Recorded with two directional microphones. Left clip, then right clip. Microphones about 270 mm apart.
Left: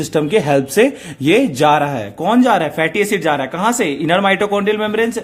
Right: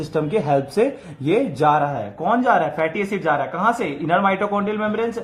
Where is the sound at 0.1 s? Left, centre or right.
Left.